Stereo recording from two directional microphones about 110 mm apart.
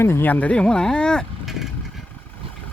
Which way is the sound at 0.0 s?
20° left (ahead or behind).